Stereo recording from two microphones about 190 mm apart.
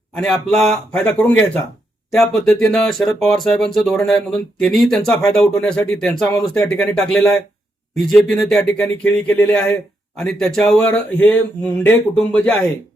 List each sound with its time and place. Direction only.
0.2 s speech: centre (ahead or behind)